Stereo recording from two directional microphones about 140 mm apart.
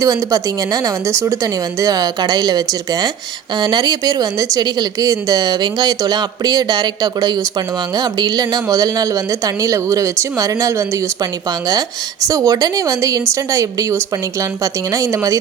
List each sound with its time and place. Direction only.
0.0 s a woman's voice: 25° right (ahead or behind)
12.3 s a woman's voice: 25° right (ahead or behind)